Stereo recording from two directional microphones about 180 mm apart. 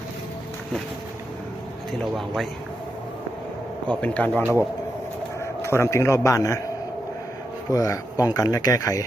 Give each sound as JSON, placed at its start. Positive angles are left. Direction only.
{"t": 1.9, "sound": "a man's voice", "side_deg": 0}
{"t": 3.8, "sound": "a man's voice", "side_deg": 10}
{"t": 5.6, "sound": "a man's voice", "side_deg": 15}
{"t": 7.7, "sound": "speech", "side_deg": 20}